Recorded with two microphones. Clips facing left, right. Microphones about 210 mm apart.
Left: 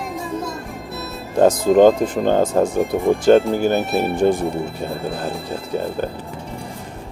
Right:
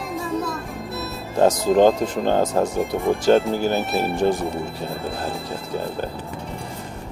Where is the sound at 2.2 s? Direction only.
55° left (ahead or behind).